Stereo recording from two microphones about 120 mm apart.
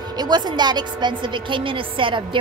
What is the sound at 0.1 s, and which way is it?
A woman's voice, 35° right (ahead or behind).